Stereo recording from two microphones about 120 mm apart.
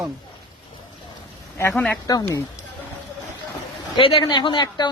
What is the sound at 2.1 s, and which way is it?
Speech, 30° left (ahead or behind).